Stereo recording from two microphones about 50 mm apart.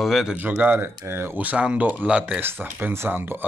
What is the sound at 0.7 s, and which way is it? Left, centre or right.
Speech, right.